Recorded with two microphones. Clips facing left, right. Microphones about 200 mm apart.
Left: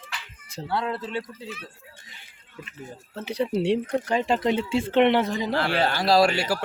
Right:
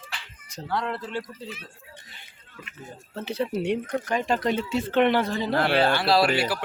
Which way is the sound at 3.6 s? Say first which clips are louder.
Left 3 dB; 30° left (ahead or behind).